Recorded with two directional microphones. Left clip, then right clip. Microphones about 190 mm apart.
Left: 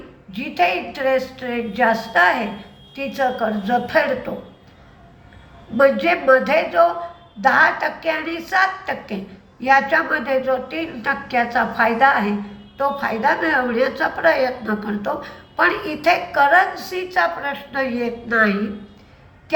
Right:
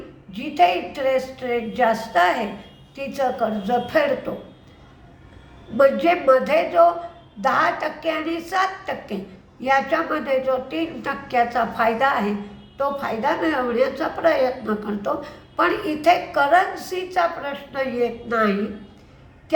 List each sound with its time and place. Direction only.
0.3 s a woman's voice: 15° right (ahead or behind)
5.7 s a woman's voice: 15° right (ahead or behind)